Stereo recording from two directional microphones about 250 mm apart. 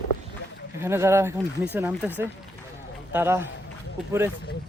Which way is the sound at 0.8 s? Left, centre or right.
Centre.